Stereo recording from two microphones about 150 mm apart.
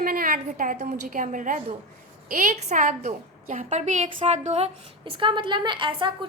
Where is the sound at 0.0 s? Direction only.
70° right (ahead or behind).